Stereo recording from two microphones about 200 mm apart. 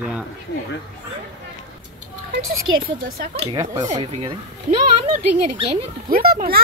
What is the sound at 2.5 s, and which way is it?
Speech, 50° right (ahead or behind).